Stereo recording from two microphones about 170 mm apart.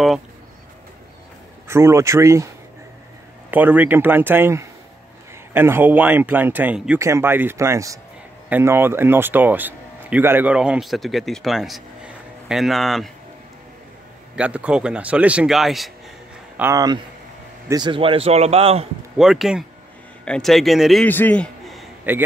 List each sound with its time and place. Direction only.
1.7 s speech: 15° right (ahead or behind); by 13.1 s centre (ahead or behind)
14.3 s a man's voice: 5° right (ahead or behind)
16.5 s speech: 15° right (ahead or behind)
17.6 s a man's voice: 25° right (ahead or behind)
19.1 s a man's voice: centre (ahead or behind)
21.1 s a sound: 10° left (ahead or behind)
22.1 s speech: 10° right (ahead or behind)